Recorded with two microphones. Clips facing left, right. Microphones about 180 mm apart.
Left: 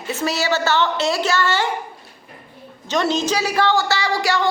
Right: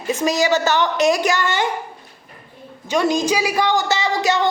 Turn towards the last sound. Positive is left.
turn(degrees=-20)  # may be behind; listen again after turning